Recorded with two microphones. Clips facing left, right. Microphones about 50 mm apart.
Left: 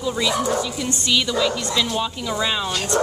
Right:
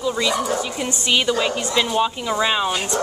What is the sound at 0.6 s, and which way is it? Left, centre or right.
Speech, right.